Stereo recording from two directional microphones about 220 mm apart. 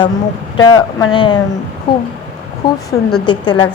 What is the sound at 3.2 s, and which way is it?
Speech, 20° left (ahead or behind).